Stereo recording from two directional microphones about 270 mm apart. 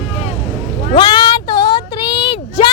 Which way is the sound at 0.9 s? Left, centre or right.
Centre.